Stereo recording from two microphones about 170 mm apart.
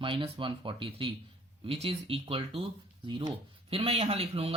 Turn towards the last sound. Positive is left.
turn(degrees=-35)  # may be behind; listen again after turning